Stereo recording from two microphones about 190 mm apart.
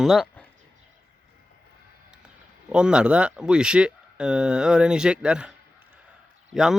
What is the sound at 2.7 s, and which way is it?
Speech, 5° right (ahead or behind).